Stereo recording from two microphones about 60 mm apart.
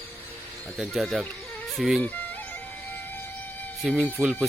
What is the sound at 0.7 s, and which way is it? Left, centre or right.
Speech, centre.